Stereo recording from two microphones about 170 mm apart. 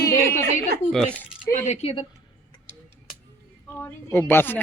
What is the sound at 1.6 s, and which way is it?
Speech, 40° left (ahead or behind).